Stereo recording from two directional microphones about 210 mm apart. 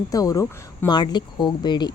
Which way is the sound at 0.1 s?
15° left (ahead or behind).